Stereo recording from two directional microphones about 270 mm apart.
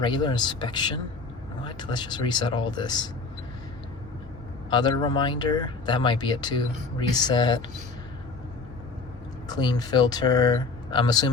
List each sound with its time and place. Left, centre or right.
0.0 s speech: centre
4.7 s speech: centre
9.5 s speech: centre